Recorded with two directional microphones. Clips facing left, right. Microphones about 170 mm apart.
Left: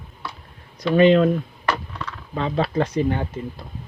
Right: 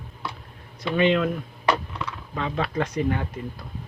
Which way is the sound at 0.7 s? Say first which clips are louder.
Left 6 dB; 40° left (ahead or behind).